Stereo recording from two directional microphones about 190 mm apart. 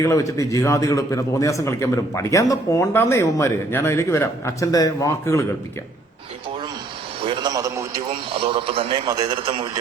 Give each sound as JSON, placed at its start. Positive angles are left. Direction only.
{"t": 0.0, "sound": "a man's voice", "side_deg": 15}
{"t": 7.2, "sound": "a man's voice", "side_deg": -25}
{"t": 8.3, "sound": "a man's voice", "side_deg": -30}